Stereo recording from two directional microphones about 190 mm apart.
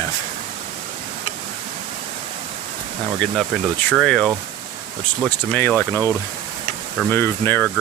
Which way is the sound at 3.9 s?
Centre (ahead or behind).